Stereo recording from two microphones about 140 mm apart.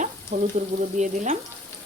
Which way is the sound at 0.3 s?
60° right (ahead or behind).